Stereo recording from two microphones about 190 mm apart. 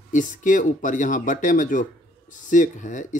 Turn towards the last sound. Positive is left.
turn(degrees=40)  # may be behind; listen again after turning